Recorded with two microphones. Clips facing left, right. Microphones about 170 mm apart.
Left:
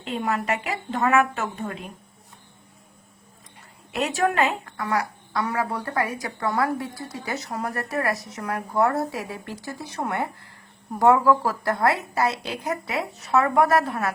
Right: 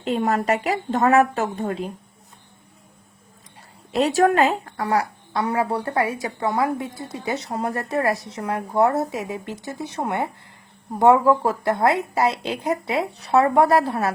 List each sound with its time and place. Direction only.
0.0 s a woman's voice: 40° right (ahead or behind)
3.9 s a woman's voice: 35° right (ahead or behind)